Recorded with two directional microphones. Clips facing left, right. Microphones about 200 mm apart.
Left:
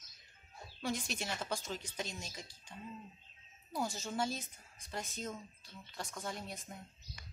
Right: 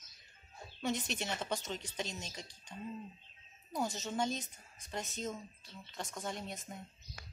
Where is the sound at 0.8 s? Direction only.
5° left (ahead or behind).